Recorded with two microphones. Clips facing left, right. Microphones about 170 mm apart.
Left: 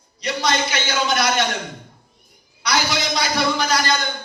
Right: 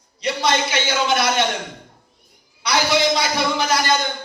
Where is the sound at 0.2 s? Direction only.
25° right (ahead or behind).